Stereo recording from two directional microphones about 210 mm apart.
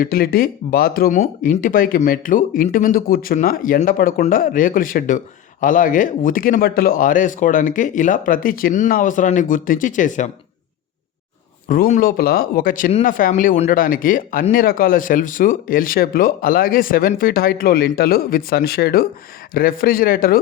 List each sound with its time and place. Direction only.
0.0 s speech: 45° left (ahead or behind)
11.7 s speech: 40° left (ahead or behind)